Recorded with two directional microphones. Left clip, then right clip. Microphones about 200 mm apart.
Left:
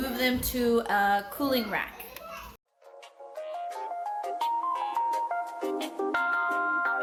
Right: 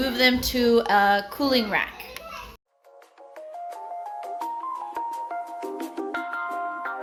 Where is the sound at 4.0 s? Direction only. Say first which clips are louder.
Left 2 dB; centre (ahead or behind).